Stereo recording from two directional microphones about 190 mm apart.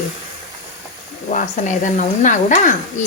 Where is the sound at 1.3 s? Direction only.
40° left (ahead or behind).